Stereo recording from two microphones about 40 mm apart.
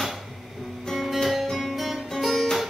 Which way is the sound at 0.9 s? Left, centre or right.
Centre.